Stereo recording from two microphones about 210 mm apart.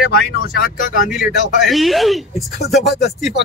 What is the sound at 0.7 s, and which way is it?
Speech, 40° left (ahead or behind).